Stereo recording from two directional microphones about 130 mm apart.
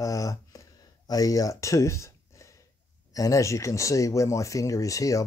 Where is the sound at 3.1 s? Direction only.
25° left (ahead or behind).